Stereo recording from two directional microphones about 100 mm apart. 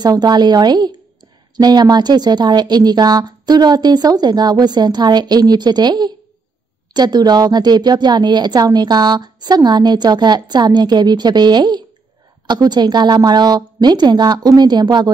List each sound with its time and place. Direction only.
0.0 s a woman's voice: 45° right (ahead or behind)